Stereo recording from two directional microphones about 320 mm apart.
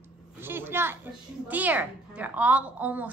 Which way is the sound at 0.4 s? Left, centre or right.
Centre.